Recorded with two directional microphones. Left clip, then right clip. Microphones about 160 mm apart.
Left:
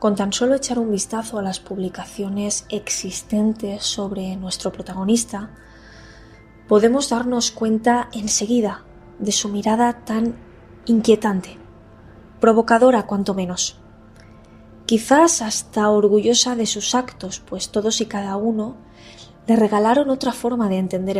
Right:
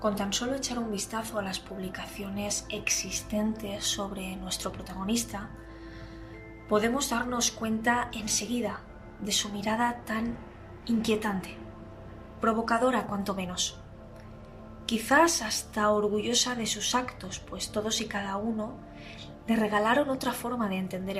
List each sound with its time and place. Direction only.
0.0 s speech: 50° left (ahead or behind); by 4.7 s 30° left (ahead or behind)
4.8 s speech: 45° left (ahead or behind)
6.7 s a woman's voice: 40° left (ahead or behind)
14.8 s speech: 40° left (ahead or behind)